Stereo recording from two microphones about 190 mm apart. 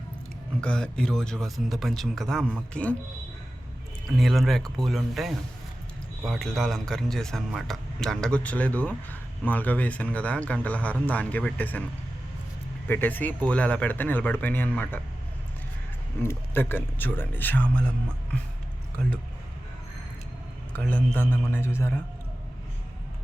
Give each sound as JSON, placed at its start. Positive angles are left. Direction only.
{"t": 0.6, "sound": "speech", "side_deg": 5}
{"t": 4.2, "sound": "speech", "side_deg": 0}
{"t": 12.9, "sound": "speech", "side_deg": 10}
{"t": 16.2, "sound": "speech", "side_deg": 10}
{"t": 20.7, "sound": "speech", "side_deg": 10}